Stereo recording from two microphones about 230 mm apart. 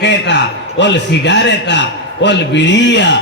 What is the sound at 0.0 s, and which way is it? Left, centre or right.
A man's voice, left.